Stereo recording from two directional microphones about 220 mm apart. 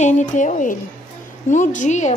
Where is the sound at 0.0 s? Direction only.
35° left (ahead or behind).